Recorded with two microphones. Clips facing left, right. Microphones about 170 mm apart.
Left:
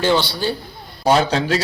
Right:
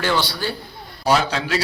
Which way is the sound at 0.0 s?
25° left (ahead or behind).